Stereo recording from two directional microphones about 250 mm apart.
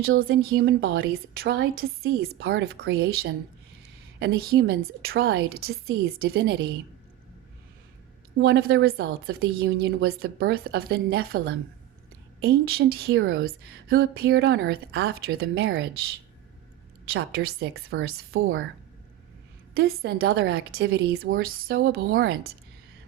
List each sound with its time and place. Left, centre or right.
0.2 s a woman's voice: right
8.4 s a woman's voice: right
15.5 s speech: right
17.1 s a woman's voice: right
19.7 s a woman's voice: right
20.6 s a woman's voice: right